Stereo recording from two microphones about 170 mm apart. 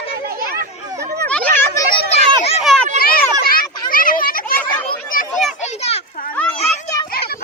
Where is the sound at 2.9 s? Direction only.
60° left (ahead or behind).